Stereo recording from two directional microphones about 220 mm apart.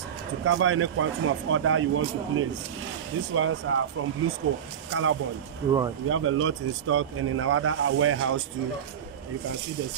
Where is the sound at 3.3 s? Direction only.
65° right (ahead or behind).